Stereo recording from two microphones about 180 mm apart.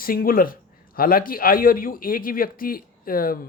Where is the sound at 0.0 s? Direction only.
55° left (ahead or behind).